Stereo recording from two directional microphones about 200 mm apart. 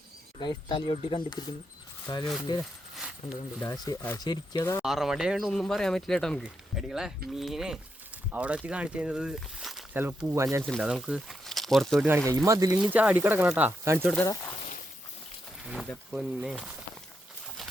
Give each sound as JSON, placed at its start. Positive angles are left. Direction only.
{"t": 0.3, "sound": "speech", "side_deg": 25}
{"t": 2.9, "sound": "a sound", "side_deg": 0}
{"t": 3.6, "sound": "speech", "side_deg": 15}
{"t": 4.8, "sound": "speech", "side_deg": 0}
{"t": 10.6, "sound": "speech", "side_deg": 0}
{"t": 12.5, "sound": "speech", "side_deg": -15}
{"t": 12.9, "sound": "speech", "side_deg": -10}
{"t": 14.1, "sound": "speech", "side_deg": 10}
{"t": 15.6, "sound": "a sound", "side_deg": -5}
{"t": 16.1, "sound": "speech", "side_deg": -5}